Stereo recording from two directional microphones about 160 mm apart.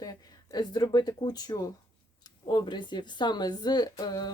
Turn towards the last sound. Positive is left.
turn(degrees=25)  # may be behind; listen again after turning